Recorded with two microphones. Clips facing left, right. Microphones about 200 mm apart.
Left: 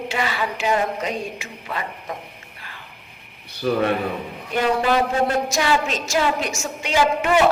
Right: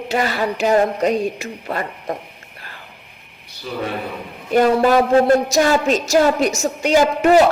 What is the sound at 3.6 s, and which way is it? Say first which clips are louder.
Speech: left 7 dB; 60° left (ahead or behind).